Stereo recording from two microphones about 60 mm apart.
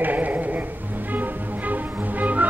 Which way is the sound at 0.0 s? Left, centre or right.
Right.